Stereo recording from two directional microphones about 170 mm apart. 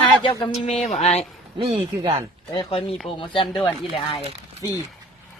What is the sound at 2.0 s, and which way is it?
Speech, 30° right (ahead or behind).